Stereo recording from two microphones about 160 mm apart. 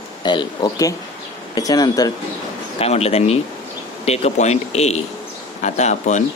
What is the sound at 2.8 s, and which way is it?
Speech, 40° left (ahead or behind).